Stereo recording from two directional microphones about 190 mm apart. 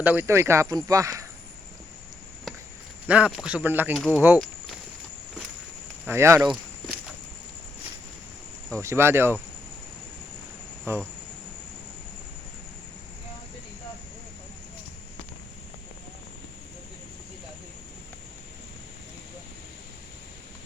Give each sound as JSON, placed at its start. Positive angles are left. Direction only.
{"t": 0.0, "sound": "speech", "side_deg": -10}
{"t": 3.1, "sound": "speech", "side_deg": -5}
{"t": 6.1, "sound": "speech", "side_deg": -15}
{"t": 8.8, "sound": "speech", "side_deg": -15}
{"t": 10.9, "sound": "speech", "side_deg": -15}